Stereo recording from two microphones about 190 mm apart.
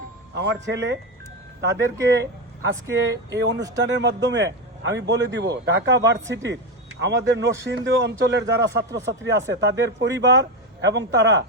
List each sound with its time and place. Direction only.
0.3 s speech: 65° right (ahead or behind)